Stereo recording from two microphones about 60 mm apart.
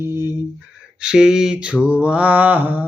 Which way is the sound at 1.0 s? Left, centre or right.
Centre.